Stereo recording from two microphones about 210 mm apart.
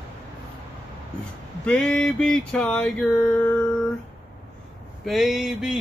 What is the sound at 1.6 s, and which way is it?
Speech, 5° left (ahead or behind).